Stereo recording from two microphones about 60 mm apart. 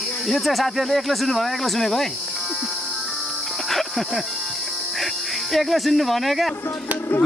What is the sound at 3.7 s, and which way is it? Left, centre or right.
Music, centre.